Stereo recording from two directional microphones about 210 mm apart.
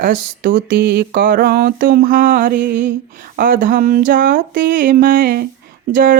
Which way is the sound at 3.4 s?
40° right (ahead or behind).